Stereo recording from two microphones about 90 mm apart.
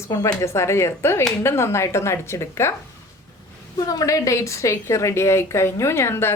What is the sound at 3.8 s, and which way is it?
A woman's voice, 40° left (ahead or behind).